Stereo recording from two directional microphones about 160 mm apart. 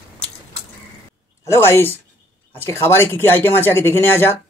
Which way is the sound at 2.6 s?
15° left (ahead or behind).